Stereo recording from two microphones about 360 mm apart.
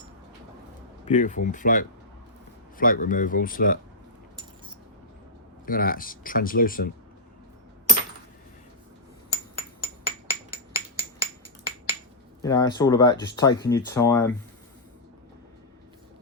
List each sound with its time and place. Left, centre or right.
1.0 s speech: left
5.6 s speech: left
9.6 s hammer: right
10.5 s a sound: centre
12.4 s speech: centre